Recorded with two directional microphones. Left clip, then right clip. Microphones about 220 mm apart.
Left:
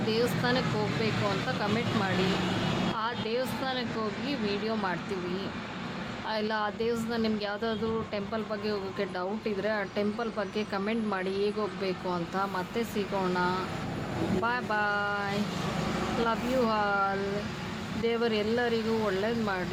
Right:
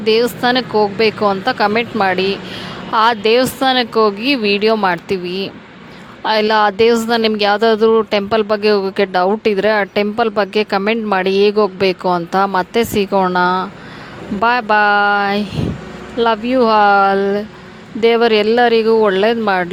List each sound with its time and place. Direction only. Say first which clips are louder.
0.1 s speech: right 16 dB; 40° right (ahead or behind)
6.2 s speech: right 19 dB; 45° right (ahead or behind)